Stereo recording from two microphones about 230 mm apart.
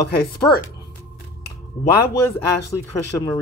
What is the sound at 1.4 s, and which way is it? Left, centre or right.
Finger snapping, left.